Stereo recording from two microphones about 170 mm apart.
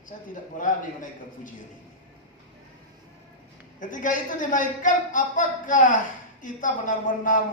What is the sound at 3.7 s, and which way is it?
A man's voice, 50° left (ahead or behind).